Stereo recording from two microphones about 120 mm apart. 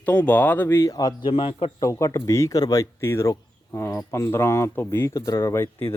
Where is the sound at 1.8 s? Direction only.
25° left (ahead or behind).